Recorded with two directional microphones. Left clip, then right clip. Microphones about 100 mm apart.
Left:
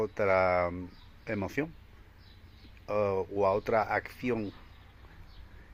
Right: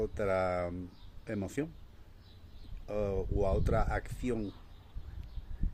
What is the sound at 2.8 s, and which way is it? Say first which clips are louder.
Speech: left 5 dB; 15° right (ahead or behind).